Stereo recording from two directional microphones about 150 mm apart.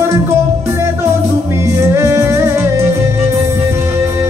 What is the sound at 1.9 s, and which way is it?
Music, 15° right (ahead or behind).